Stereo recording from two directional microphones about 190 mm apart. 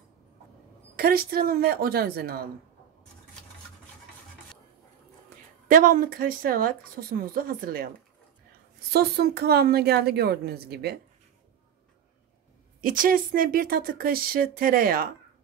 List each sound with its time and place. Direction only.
0.9 s speech: 50° right (ahead or behind)
5.7 s speech: 45° right (ahead or behind)
8.9 s a woman's voice: 55° right (ahead or behind)
12.8 s speech: 45° right (ahead or behind)